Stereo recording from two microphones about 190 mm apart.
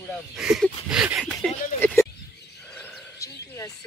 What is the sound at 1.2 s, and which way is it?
Speech, 10° left (ahead or behind).